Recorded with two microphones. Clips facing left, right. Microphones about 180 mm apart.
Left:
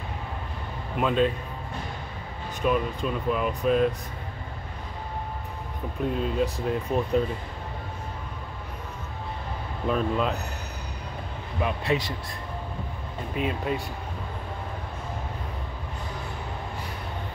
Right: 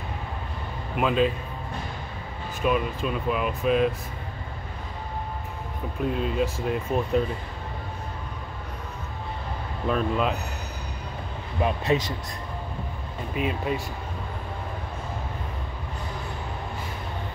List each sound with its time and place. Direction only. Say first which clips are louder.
0.9 s speech: right 1 dB; 5° right (ahead or behind)
2.6 s speech: even; 10° right (ahead or behind)
6.1 s speech: left 1 dB; 5° right (ahead or behind)
9.8 s speech: right 1 dB; centre (ahead or behind)
11.6 s speech: right 2 dB; 25° right (ahead or behind)
13.4 s speech: right 1 dB; 5° right (ahead or behind)